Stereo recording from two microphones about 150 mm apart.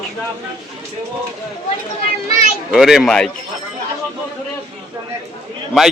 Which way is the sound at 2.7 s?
5° right (ahead or behind).